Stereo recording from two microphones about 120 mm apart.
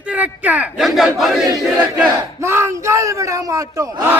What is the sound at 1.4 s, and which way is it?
Battle cry, 30° right (ahead or behind).